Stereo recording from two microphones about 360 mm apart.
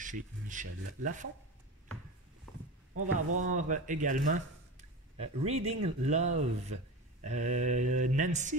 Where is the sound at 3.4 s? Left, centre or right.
Right.